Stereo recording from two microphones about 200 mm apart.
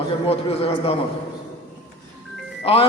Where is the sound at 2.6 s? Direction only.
30° left (ahead or behind).